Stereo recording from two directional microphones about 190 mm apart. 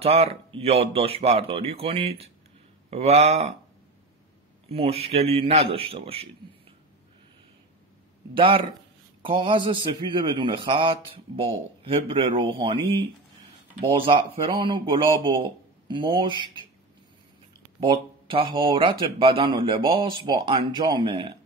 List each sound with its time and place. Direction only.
0.0 s speech: 30° right (ahead or behind)
4.6 s speech: 30° right (ahead or behind)
8.4 s a man's voice: 30° right (ahead or behind)
17.7 s a man's voice: 25° right (ahead or behind)